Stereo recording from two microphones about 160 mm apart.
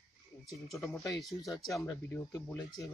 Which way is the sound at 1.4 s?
20° left (ahead or behind).